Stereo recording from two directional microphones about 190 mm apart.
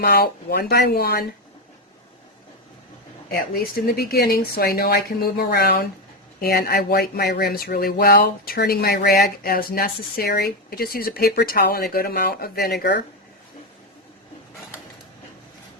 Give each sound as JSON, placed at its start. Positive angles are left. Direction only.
{"t": 0.0, "sound": "speech", "side_deg": 55}
{"t": 3.2, "sound": "speech", "side_deg": 50}